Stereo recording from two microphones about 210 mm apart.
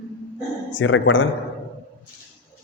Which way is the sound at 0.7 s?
65° left (ahead or behind).